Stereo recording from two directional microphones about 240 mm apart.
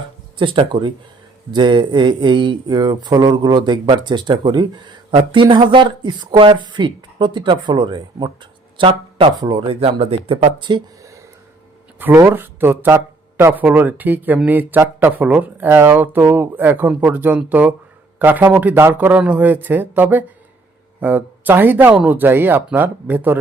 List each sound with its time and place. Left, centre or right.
0.3 s speech: centre